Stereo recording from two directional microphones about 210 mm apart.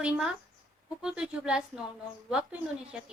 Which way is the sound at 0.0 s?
5° right (ahead or behind).